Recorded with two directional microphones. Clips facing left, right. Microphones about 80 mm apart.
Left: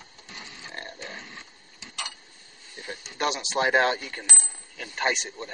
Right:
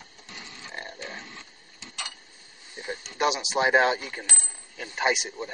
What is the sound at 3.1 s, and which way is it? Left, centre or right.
Speech, centre.